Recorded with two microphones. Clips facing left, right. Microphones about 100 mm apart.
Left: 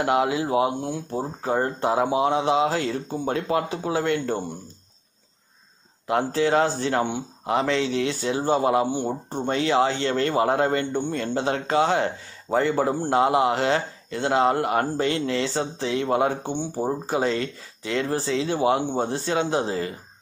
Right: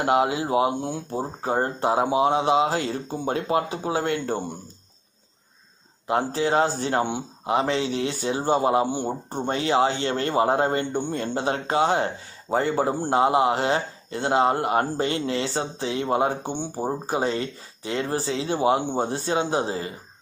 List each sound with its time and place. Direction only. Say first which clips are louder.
0.0 s a man's voice: even; 25° right (ahead or behind)
4.0 s speech: left 1 dB; 45° right (ahead or behind)
6.0 s a man's voice: left 1 dB; 25° right (ahead or behind)
8.8 s a man's voice: left 1 dB; 20° right (ahead or behind)
16.4 s speech: left 2 dB; 15° right (ahead or behind)
17.1 s a man's voice: even; 25° right (ahead or behind)